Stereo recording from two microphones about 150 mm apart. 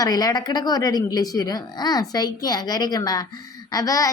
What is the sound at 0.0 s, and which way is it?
Speech, 25° left (ahead or behind).